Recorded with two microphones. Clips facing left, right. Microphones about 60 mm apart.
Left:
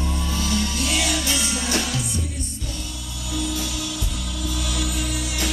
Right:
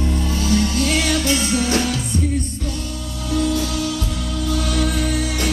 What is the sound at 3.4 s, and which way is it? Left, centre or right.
Music, right.